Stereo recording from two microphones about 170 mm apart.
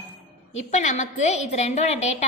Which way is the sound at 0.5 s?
40° left (ahead or behind).